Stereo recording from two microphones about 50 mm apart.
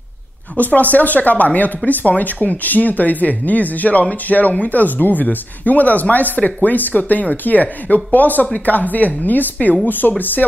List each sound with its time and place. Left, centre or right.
0.6 s speech: left